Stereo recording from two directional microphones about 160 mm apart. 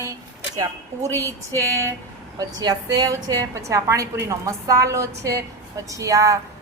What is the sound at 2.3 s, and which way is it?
A woman's voice, 25° right (ahead or behind).